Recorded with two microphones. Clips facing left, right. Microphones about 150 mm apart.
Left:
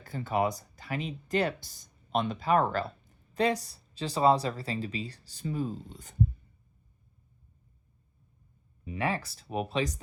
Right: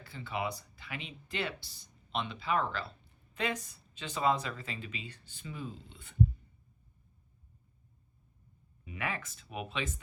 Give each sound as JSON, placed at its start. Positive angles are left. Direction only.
{"t": 0.0, "sound": "speech", "side_deg": 45}
{"t": 3.3, "sound": "speech", "side_deg": 35}
{"t": 8.8, "sound": "speech", "side_deg": 35}